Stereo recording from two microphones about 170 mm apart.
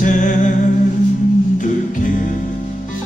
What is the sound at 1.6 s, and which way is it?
Music, 50° left (ahead or behind).